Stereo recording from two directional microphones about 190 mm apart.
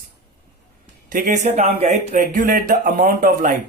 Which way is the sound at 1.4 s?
35° right (ahead or behind).